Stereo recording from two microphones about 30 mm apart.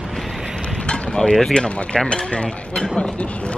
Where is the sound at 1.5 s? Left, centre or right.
Left.